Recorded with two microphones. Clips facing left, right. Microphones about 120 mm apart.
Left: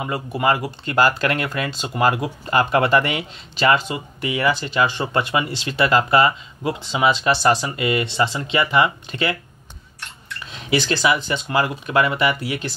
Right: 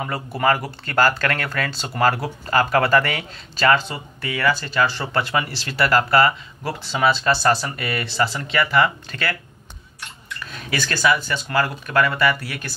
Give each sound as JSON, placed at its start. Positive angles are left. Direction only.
{"t": 0.0, "sound": "speech", "side_deg": 15}
{"t": 10.4, "sound": "speech", "side_deg": 20}